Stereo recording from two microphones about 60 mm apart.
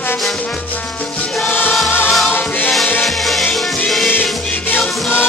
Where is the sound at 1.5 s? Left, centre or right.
Left.